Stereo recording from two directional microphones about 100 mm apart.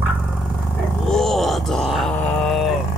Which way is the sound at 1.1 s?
5° left (ahead or behind).